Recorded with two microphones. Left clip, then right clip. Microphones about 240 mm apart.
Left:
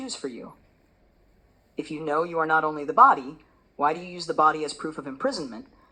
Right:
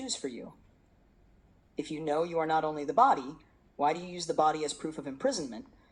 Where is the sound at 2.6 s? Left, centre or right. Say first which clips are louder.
Left 8 dB; left.